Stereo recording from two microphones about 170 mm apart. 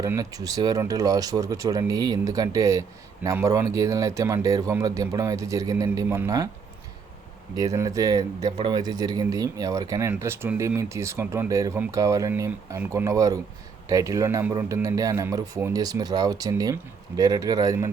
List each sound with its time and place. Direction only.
0.0 s speech: 20° right (ahead or behind)
7.5 s speech: 20° right (ahead or behind)